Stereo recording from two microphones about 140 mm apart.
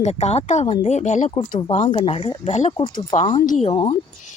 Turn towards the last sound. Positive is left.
turn(degrees=35)  # may be behind; listen again after turning